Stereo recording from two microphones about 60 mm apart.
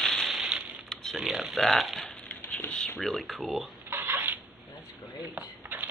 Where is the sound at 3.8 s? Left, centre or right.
Right.